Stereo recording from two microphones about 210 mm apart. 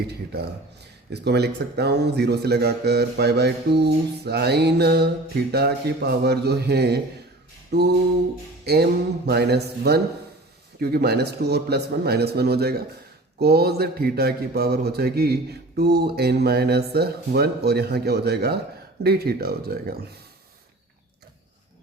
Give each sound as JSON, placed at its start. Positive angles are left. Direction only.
{"t": 1.1, "sound": "speech", "side_deg": -50}